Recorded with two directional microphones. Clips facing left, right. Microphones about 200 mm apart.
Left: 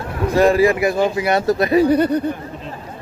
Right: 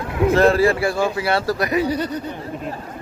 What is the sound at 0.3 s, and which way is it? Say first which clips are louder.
A man's voice: left 2 dB; 15° left (ahead or behind).